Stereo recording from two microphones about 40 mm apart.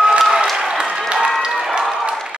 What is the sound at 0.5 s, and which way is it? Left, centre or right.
Applause, centre.